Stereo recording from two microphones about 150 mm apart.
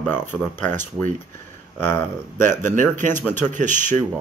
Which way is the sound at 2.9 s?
55° right (ahead or behind).